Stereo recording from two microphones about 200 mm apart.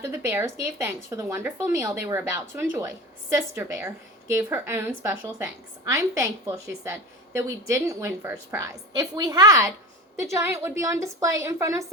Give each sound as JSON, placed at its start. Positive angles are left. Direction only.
{"t": 0.0, "sound": "a woman's voice", "side_deg": -10}